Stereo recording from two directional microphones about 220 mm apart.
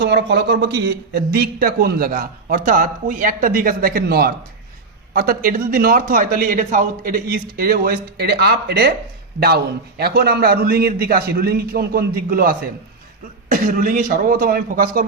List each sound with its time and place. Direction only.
0.0 s a man's voice: 50° right (ahead or behind)
10.0 s a man's voice: 45° right (ahead or behind)